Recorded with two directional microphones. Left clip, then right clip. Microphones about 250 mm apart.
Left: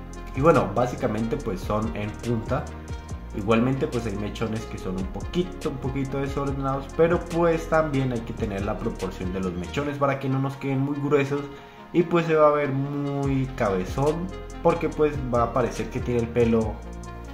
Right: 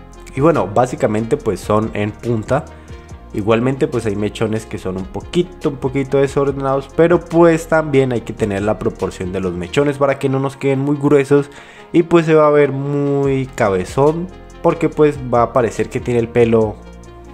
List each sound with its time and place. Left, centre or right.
0.4 s speech: right